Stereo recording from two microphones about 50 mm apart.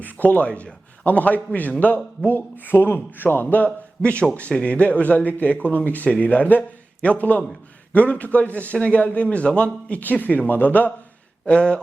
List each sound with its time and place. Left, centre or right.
0.0 s speech: left
4.0 s a man's voice: left
10.0 s speech: left
11.4 s a man's voice: left